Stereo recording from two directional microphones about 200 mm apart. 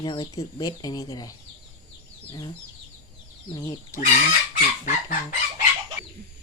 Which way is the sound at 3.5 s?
20° left (ahead or behind).